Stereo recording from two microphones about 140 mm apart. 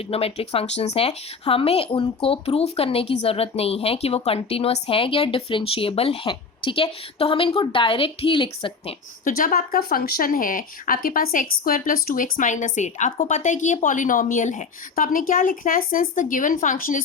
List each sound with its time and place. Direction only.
0.1 s speech: 45° left (ahead or behind)
9.2 s speech: 85° left